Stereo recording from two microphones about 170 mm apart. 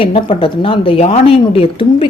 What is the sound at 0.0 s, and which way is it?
A woman's voice, 30° left (ahead or behind).